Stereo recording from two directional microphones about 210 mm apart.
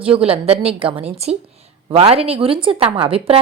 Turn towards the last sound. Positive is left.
turn(degrees=-25)  # may be behind; listen again after turning